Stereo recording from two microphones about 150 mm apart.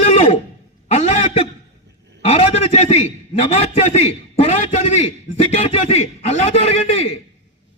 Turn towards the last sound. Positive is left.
turn(degrees=45)  # may be behind; listen again after turning